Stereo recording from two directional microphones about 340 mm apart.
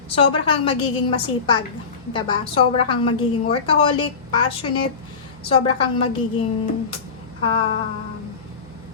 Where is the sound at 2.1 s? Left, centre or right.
Centre.